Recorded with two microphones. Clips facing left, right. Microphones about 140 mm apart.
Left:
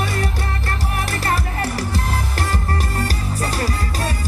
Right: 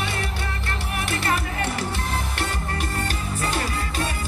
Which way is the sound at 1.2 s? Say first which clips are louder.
Left 3 dB; 40° left (ahead or behind).